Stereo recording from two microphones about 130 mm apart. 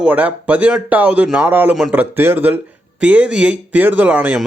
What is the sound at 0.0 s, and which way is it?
A man's voice, 10° right (ahead or behind).